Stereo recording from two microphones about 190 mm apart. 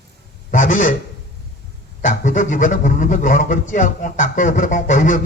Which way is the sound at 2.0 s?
40° left (ahead or behind).